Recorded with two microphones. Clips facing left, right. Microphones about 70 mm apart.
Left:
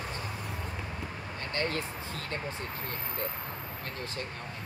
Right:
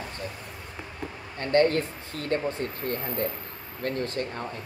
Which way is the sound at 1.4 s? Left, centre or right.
Right.